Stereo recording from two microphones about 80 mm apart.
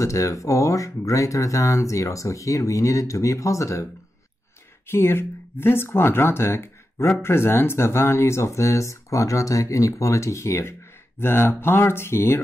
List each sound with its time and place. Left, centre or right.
0.0 s speech: left
4.8 s speech: left